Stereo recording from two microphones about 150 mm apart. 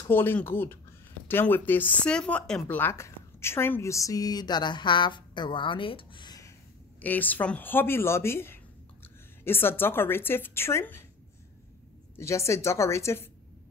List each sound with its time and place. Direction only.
0.0 s speech: 15° left (ahead or behind)
7.0 s speech: 10° left (ahead or behind)
12.2 s a woman's voice: 20° left (ahead or behind)